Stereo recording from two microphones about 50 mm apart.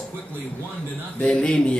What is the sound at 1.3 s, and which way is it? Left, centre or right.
Speech, centre.